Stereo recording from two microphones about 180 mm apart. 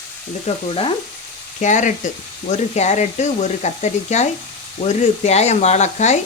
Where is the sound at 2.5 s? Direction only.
40° left (ahead or behind).